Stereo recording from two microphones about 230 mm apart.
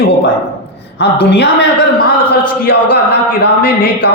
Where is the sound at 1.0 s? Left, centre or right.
Left.